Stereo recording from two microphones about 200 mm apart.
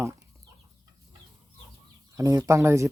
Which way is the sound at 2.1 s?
15° right (ahead or behind).